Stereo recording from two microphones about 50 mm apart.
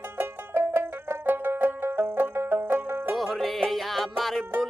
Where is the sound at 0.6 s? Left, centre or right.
Right.